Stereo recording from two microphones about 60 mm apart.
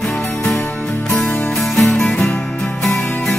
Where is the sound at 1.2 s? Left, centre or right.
Left.